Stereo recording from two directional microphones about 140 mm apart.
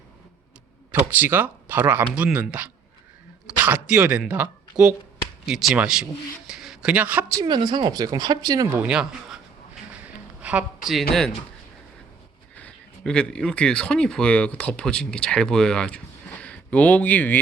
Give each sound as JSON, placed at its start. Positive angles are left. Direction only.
{"t": 0.9, "sound": "speech", "side_deg": -10}
{"t": 7.4, "sound": "speech", "side_deg": -35}
{"t": 8.8, "sound": "speech", "side_deg": -5}
{"t": 10.4, "sound": "speech", "side_deg": -10}
{"t": 12.5, "sound": "speech", "side_deg": 10}